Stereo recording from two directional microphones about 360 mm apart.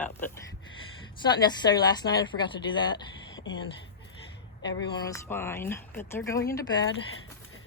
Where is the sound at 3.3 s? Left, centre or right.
Left.